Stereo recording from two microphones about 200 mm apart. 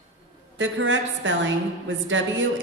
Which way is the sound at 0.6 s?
70° right (ahead or behind).